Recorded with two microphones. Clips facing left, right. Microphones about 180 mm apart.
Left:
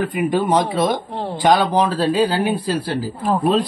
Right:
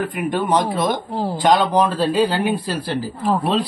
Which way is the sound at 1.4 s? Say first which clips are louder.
Left 1 dB; centre (ahead or behind).